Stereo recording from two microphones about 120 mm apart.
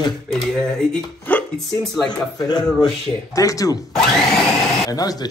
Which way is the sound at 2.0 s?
35° left (ahead or behind).